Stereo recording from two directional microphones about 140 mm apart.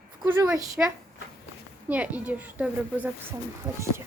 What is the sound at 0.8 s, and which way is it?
A woman's voice, 10° right (ahead or behind).